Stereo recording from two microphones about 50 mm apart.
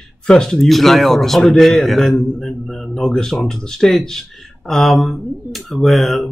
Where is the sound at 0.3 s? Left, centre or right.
Centre.